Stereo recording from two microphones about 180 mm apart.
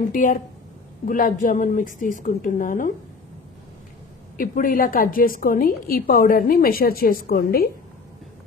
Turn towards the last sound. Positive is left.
turn(degrees=55)  # may be behind; listen again after turning